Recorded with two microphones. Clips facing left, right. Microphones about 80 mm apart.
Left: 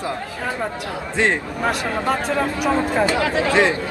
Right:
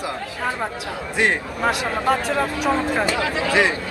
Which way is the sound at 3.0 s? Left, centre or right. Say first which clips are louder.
Left 3 dB; left.